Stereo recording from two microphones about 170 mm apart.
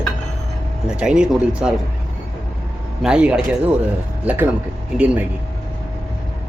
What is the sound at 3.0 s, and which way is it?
Speech, 5° right (ahead or behind).